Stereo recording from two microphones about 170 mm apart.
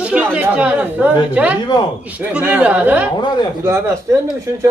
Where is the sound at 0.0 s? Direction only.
10° right (ahead or behind).